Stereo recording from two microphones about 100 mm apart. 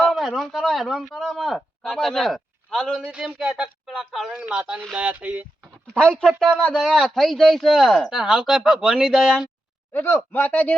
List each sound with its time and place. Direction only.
0.0 s speech: centre (ahead or behind)
3.1 s speech: 10° right (ahead or behind)
5.9 s speech: 10° left (ahead or behind)
8.2 s speech: 5° right (ahead or behind)
9.9 s a man's voice: 25° left (ahead or behind)